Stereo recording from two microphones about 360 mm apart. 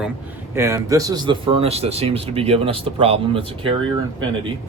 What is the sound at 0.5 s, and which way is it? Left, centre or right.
A man's voice, centre.